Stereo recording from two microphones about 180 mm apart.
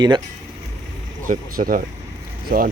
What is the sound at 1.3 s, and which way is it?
Speech, 50° right (ahead or behind).